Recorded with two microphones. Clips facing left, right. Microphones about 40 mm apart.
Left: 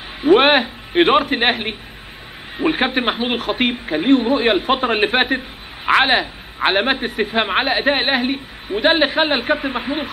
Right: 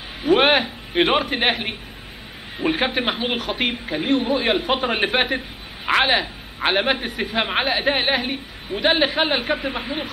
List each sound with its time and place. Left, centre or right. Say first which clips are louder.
0.2 s a man's voice: left 4 dB; centre